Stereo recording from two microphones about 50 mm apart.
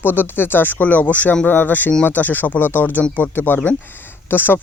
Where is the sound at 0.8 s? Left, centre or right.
Left.